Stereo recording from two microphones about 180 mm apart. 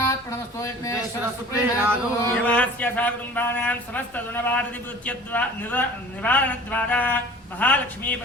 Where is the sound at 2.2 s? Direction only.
10° left (ahead or behind).